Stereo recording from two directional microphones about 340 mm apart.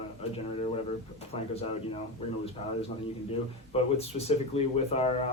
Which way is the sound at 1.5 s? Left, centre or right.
Centre.